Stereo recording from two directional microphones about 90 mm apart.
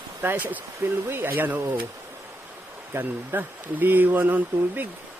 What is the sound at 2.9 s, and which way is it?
Speech, 20° right (ahead or behind).